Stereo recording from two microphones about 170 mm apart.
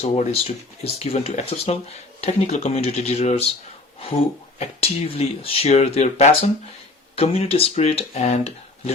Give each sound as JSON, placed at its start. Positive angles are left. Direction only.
{"t": 0.0, "sound": "speech", "side_deg": 40}
{"t": 4.5, "sound": "speech", "side_deg": 35}